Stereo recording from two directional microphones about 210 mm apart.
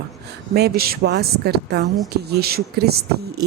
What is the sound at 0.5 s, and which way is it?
Speech, 50° right (ahead or behind).